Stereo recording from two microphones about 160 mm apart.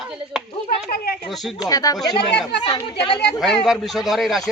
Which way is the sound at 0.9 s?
70° left (ahead or behind).